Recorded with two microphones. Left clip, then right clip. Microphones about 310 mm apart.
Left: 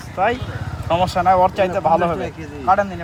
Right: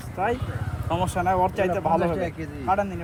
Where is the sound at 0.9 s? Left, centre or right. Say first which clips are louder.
Left 9 dB; left.